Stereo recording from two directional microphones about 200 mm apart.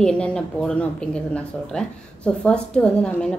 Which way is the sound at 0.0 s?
5° left (ahead or behind).